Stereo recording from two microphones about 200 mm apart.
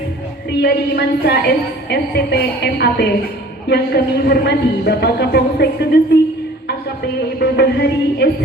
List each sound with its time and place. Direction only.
0.6 s a woman's voice: 55° left (ahead or behind)
7.3 s speech: 55° left (ahead or behind)